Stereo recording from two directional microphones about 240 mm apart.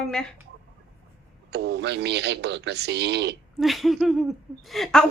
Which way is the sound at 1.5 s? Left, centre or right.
Right.